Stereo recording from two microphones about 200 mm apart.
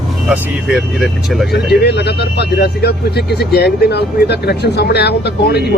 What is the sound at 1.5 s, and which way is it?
Speech, 55° left (ahead or behind).